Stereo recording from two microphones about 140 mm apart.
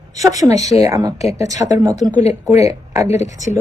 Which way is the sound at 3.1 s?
55° left (ahead or behind).